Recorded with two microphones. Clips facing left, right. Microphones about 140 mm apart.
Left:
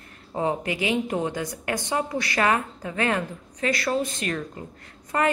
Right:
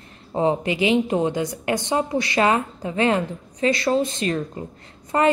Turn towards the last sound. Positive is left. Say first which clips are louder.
# right 4 dB
turn(degrees=-25)  # may be behind; listen again after turning